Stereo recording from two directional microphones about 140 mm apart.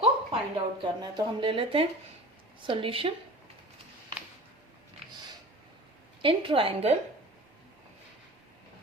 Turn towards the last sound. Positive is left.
turn(degrees=-45)  # may be behind; listen again after turning